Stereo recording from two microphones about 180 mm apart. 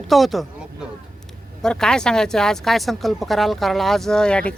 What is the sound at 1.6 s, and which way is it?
Speech, 5° left (ahead or behind).